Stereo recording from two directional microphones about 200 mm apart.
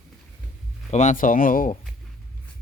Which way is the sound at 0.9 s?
35° left (ahead or behind).